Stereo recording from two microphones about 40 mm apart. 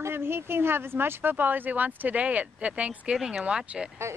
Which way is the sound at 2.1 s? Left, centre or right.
Right.